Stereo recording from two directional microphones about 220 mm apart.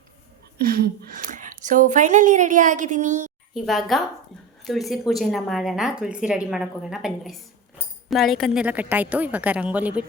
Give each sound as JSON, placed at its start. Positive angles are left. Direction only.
{"t": 0.6, "sound": "a woman's voice", "side_deg": -40}
{"t": 3.5, "sound": "a woman's voice", "side_deg": 0}